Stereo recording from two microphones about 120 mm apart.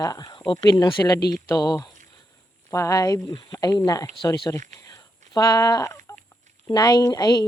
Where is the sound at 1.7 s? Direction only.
35° left (ahead or behind).